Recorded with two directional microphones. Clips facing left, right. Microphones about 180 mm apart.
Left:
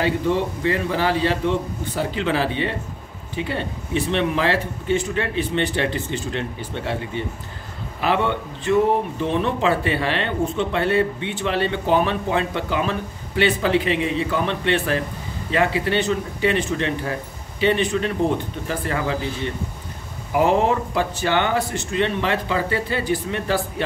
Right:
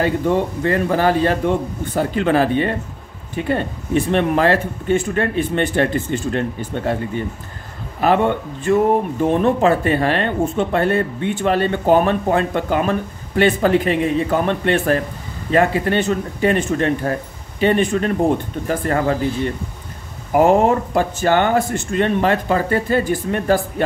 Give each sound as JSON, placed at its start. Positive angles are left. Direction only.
{"t": 0.0, "sound": "speech", "side_deg": -50}
{"t": 20.3, "sound": "speech", "side_deg": -45}